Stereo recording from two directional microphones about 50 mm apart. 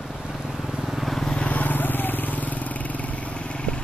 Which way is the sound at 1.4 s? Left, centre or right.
Left.